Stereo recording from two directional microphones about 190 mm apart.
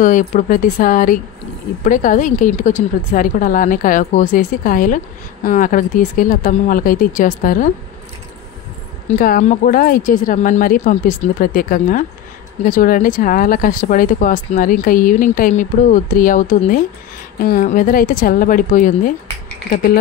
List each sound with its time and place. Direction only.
0.0 s a woman's voice: 45° left (ahead or behind)
9.0 s a woman's voice: 50° left (ahead or behind)